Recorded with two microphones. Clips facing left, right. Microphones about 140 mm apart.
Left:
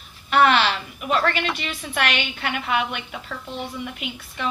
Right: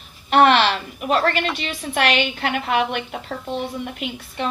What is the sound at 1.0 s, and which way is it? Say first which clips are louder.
A woman's voice: right 3 dB; 35° right (ahead or behind).